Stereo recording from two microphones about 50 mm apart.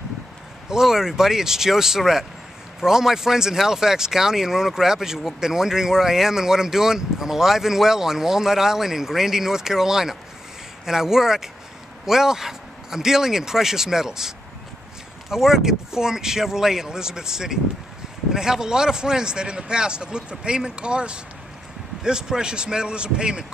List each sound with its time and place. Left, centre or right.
0.7 s speech: centre